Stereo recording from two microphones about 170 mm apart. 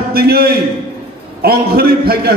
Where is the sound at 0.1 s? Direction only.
65° right (ahead or behind).